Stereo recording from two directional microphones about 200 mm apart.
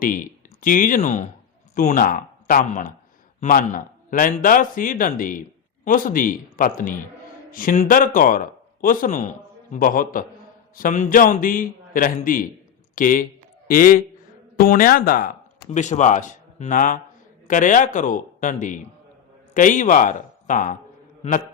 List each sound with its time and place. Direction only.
0.0 s a man's voice: 45° left (ahead or behind)